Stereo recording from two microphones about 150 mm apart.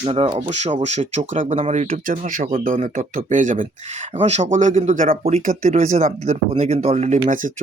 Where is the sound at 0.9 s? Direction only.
50° right (ahead or behind).